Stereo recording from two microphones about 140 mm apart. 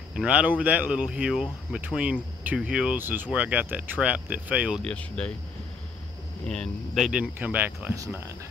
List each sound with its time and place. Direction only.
0.1 s speech: 10° right (ahead or behind)
4.8 s speech: 10° left (ahead or behind)
6.4 s speech: 5° left (ahead or behind); by 8.4 s 20° right (ahead or behind)